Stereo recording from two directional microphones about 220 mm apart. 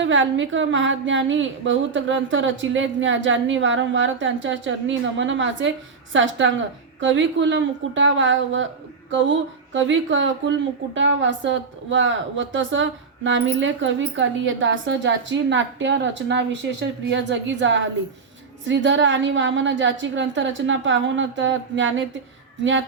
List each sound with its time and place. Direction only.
0.0 s a woman's voice: 60° right (ahead or behind)